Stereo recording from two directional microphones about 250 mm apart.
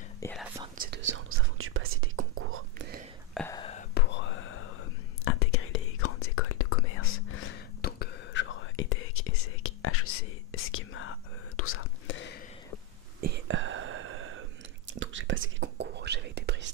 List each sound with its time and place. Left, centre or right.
0.2 s speech: centre
0.7 s whispering: right
3.3 s whispering: centre
3.9 s whispering: left
7.8 s whispering: left
13.2 s whispering: right